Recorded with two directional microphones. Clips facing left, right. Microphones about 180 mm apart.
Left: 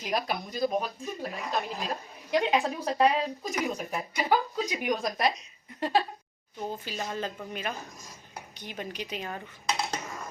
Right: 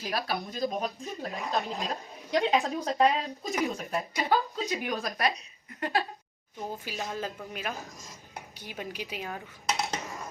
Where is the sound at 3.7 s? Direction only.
15° left (ahead or behind).